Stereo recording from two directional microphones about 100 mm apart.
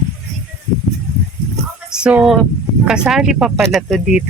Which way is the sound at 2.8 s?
5° right (ahead or behind).